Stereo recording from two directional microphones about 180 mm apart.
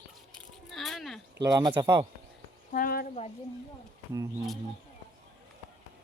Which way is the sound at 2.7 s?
55° left (ahead or behind).